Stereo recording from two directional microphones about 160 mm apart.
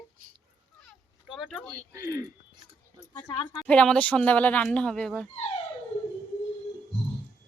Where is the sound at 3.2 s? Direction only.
20° left (ahead or behind).